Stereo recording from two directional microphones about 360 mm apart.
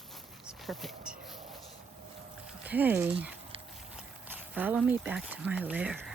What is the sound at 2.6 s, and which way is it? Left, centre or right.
Speech, centre.